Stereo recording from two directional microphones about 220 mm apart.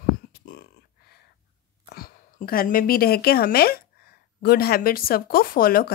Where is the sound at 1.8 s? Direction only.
45° left (ahead or behind).